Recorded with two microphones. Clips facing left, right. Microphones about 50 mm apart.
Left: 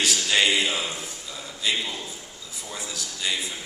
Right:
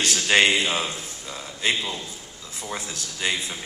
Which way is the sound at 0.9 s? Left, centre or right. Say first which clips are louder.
Right 1 dB; right.